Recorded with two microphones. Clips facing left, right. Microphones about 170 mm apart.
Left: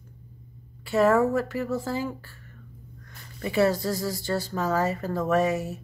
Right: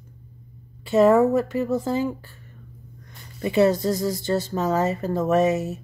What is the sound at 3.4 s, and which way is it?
Speech, 20° right (ahead or behind).